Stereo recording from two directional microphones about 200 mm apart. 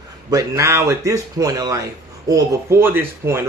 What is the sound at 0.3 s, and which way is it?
A man's voice, 15° right (ahead or behind).